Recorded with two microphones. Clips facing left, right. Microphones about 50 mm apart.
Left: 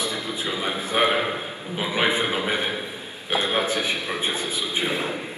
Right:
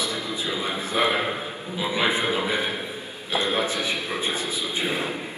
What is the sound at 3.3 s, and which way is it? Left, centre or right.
A man's voice, left.